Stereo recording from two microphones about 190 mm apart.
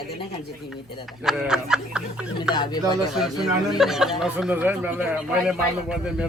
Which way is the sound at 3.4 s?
Centre (ahead or behind).